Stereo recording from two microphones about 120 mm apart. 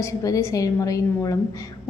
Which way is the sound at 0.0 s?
25° left (ahead or behind).